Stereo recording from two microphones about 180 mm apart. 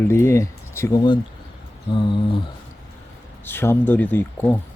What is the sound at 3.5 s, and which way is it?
Speech, 10° left (ahead or behind).